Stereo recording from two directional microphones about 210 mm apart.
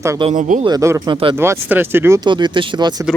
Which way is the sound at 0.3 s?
35° right (ahead or behind).